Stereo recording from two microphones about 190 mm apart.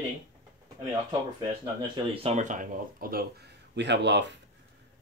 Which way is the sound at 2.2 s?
40° right (ahead or behind).